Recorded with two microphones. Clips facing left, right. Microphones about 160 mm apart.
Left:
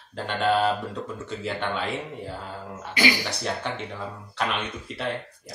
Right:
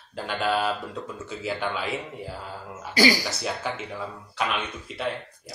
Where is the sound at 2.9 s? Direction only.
35° right (ahead or behind).